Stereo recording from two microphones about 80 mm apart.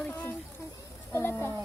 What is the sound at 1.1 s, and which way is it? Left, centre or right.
Speech, left.